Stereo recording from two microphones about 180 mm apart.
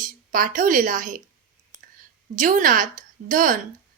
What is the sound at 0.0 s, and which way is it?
A woman's voice, 50° right (ahead or behind).